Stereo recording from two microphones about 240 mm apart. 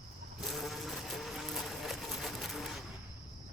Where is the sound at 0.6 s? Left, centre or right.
Centre.